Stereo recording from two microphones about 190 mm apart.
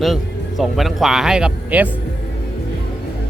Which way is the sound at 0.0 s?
Centre (ahead or behind).